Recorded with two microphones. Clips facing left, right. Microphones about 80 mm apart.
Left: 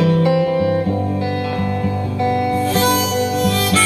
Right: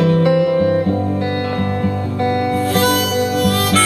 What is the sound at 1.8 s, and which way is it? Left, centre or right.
Music, right.